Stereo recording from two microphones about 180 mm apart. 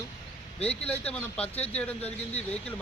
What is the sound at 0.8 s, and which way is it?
Speech, 5° left (ahead or behind).